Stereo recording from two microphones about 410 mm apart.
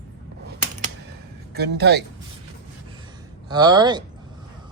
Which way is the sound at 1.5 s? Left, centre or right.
Right.